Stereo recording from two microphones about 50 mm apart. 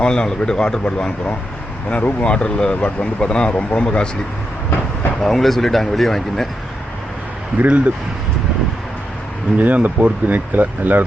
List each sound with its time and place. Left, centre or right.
0.0 s speech: centre
5.2 s speech: centre
7.6 s speech: right
9.6 s speech: right